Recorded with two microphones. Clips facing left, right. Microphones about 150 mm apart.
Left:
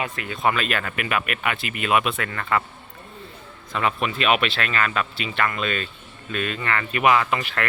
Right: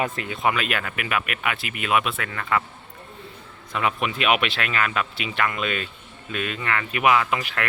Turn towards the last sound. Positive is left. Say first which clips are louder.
# left 1 dB
turn(degrees=-10)  # may be behind; listen again after turning